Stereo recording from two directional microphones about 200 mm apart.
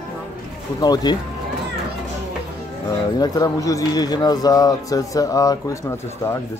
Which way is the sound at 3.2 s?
15° left (ahead or behind).